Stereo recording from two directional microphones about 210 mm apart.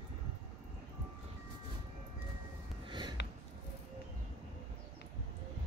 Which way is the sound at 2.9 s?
20° right (ahead or behind).